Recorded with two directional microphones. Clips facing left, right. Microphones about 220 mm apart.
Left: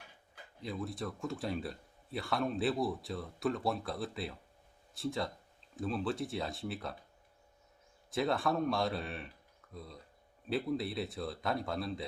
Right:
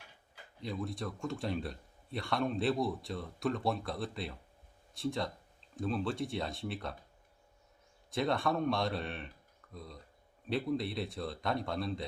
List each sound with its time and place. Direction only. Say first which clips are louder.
0.6 s speech: right 1 dB; centre (ahead or behind)
8.1 s speech: even; centre (ahead or behind)